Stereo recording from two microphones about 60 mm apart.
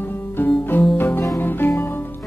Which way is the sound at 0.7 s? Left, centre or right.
Left.